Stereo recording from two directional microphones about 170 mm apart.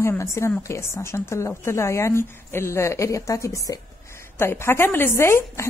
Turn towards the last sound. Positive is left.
turn(degrees=15)  # may be behind; listen again after turning